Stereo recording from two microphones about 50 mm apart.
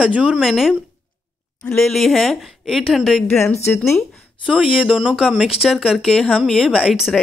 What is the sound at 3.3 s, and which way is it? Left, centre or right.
Speech, left.